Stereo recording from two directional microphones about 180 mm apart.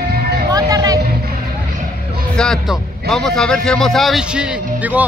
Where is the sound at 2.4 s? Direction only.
5° left (ahead or behind).